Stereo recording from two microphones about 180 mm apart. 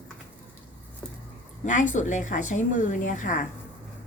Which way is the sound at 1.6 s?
45° left (ahead or behind).